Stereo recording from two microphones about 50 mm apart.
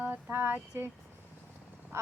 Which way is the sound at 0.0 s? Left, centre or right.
Right.